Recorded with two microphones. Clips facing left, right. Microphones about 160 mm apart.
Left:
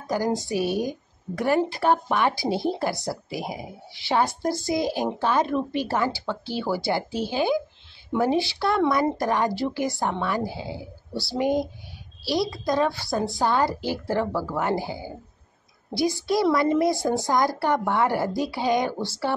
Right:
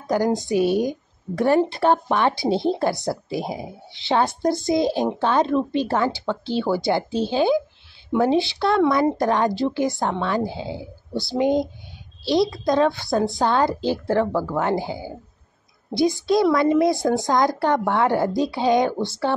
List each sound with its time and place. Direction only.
0.0 s a woman's voice: 20° right (ahead or behind)